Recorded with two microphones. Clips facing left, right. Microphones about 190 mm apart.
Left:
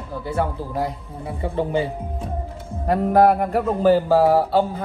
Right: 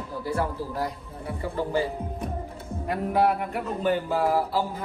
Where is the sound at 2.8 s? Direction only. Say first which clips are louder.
Left 8 dB; 40° left (ahead or behind).